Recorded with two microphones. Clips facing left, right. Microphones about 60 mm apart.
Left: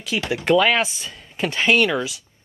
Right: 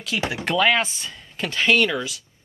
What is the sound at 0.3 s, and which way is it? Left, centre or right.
Speech, centre.